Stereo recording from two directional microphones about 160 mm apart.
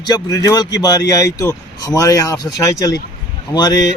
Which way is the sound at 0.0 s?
25° left (ahead or behind).